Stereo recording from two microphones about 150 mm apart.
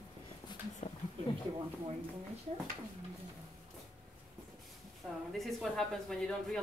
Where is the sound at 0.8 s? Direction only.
45° left (ahead or behind).